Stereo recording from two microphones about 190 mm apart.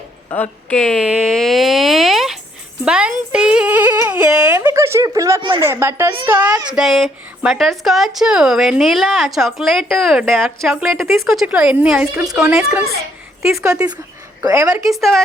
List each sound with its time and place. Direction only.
0.3 s a sound: 5° left (ahead or behind); by 5.6 s 20° right (ahead or behind)
5.6 s a woman's voice: 15° right (ahead or behind)
12.2 s a woman's voice: 20° right (ahead or behind)